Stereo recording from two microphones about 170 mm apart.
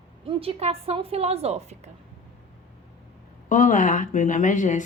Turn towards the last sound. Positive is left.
turn(degrees=50)  # may be behind; listen again after turning